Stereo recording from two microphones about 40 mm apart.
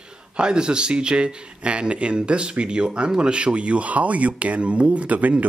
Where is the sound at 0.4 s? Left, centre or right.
Right.